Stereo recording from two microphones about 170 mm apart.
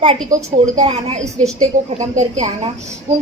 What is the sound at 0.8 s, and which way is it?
A woman's voice, 40° right (ahead or behind).